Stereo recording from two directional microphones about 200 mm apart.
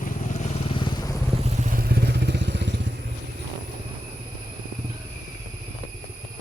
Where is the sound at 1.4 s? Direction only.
35° right (ahead or behind); by 2.9 s 60° right (ahead or behind).